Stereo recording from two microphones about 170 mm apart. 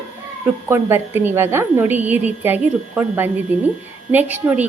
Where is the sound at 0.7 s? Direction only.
15° right (ahead or behind).